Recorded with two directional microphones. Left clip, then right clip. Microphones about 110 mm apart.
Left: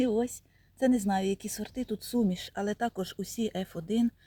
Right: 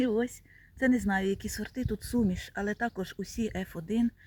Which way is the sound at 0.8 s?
10° left (ahead or behind).